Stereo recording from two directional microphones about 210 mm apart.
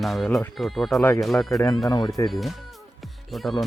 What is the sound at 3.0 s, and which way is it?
Music, centre (ahead or behind).